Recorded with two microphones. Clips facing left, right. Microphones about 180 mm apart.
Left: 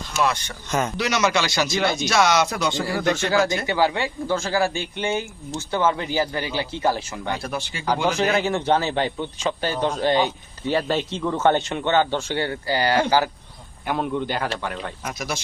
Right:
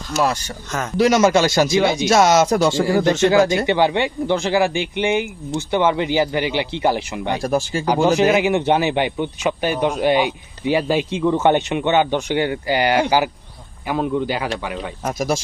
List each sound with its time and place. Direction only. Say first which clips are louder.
0.2 s speech: right 3 dB; 35° right (ahead or behind)
0.9 s speech: right 11 dB; 45° right (ahead or behind)
1.7 s speech: right 6 dB; 15° right (ahead or behind)
2.0 s speech: right 6 dB; 45° right (ahead or behind)
3.0 s speech: right 5 dB; 25° right (ahead or behind)
7.4 s speech: right 10 dB; 45° right (ahead or behind)
8.1 s speech: right 6 dB; 15° right (ahead or behind)
13.8 s speech: right 4 dB; 5° right (ahead or behind)
15.0 s speech: right 10 dB; 45° right (ahead or behind)